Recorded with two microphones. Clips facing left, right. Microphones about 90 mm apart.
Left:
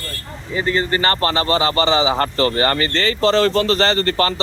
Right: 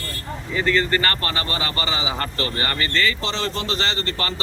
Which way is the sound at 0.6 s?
20° left (ahead or behind).